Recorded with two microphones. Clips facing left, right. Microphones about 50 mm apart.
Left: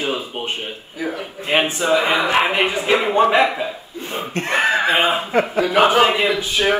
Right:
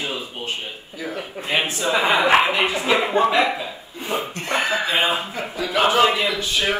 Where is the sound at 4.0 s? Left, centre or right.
Right.